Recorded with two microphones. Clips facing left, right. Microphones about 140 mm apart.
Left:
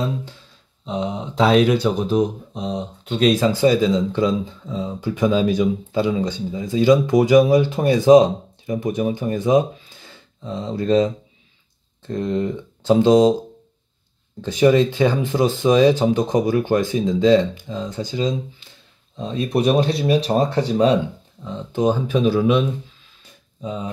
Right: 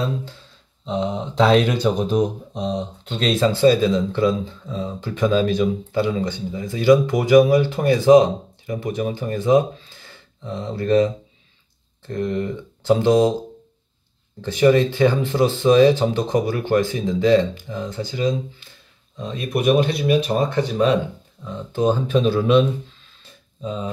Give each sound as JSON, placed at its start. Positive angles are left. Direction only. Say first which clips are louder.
{"t": 0.8, "sound": "speech", "louder": "right 1 dB", "side_deg": 10}
{"t": 14.4, "sound": "speech", "louder": "left 1 dB", "side_deg": 15}
{"t": 19.1, "sound": "speech", "louder": "left 3 dB", "side_deg": 30}
{"t": 21.5, "sound": "speech", "louder": "even", "side_deg": 15}